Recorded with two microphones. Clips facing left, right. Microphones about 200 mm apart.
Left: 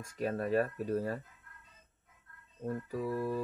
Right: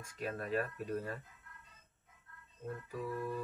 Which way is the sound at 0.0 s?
40° left (ahead or behind).